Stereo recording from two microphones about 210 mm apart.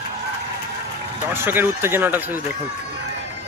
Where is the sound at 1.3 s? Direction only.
10° right (ahead or behind).